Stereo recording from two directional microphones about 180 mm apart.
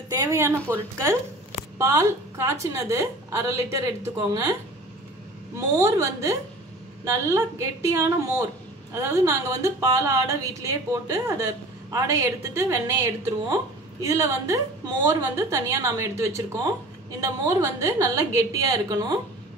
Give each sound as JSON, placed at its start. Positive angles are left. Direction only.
{"t": 0.1, "sound": "a woman's voice", "side_deg": -15}
{"t": 5.7, "sound": "a woman's voice", "side_deg": -15}